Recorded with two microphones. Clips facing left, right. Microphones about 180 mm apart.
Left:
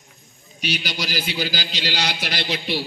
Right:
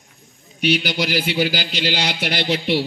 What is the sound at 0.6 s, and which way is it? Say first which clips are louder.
A man's voice: right 8 dB; 60° right (ahead or behind).